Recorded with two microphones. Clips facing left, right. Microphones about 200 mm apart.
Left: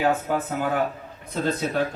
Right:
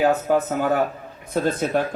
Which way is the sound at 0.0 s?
40° right (ahead or behind).